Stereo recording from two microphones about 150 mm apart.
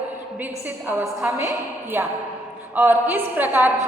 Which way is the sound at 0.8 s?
15° right (ahead or behind).